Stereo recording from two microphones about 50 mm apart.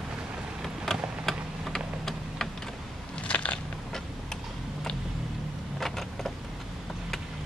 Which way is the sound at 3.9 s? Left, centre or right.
Centre.